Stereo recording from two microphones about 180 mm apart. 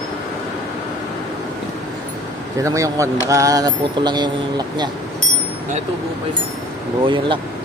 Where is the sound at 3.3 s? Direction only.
20° right (ahead or behind).